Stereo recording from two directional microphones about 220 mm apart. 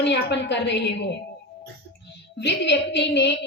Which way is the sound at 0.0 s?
50° left (ahead or behind).